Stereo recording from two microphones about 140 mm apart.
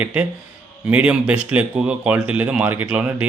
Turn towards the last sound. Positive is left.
turn(degrees=-10)  # may be behind; listen again after turning